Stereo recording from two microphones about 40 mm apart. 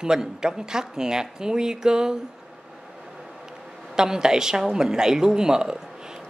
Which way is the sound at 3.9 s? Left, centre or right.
Centre.